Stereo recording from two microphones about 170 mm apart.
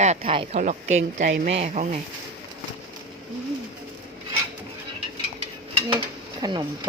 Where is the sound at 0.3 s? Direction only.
30° right (ahead or behind).